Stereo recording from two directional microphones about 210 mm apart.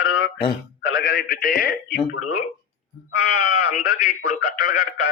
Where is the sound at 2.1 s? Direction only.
90° left.